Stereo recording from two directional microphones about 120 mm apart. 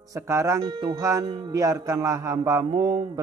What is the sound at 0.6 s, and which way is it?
Speech, 35° right (ahead or behind).